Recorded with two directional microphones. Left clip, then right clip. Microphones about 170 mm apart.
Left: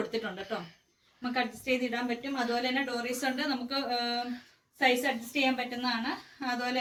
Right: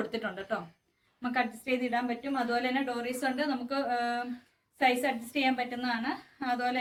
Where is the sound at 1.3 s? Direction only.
5° right (ahead or behind).